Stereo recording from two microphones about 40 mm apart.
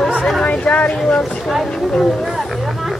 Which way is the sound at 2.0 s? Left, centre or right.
Centre.